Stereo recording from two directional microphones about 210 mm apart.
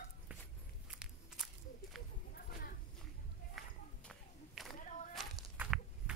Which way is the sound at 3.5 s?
5° left (ahead or behind).